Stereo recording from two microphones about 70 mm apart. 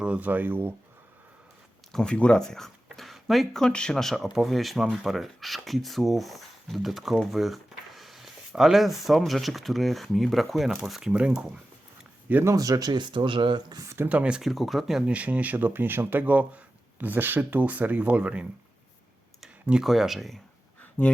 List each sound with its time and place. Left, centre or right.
0.0 s speech: centre
1.9 s speech: centre
11.1 s speech: centre
12.5 s speech: right
12.9 s speech: right
13.8 s speech: right
14.1 s speech: centre
14.4 s speech: centre
15.1 s speech: centre
19.8 s speech: centre
21.0 s speech: left